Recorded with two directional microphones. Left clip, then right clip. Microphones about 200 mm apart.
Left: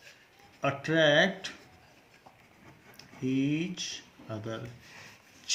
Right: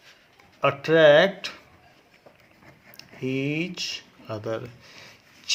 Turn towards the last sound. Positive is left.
turn(degrees=-45)  # may be behind; listen again after turning